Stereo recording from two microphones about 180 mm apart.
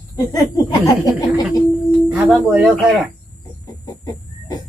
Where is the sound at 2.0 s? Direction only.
10° right (ahead or behind).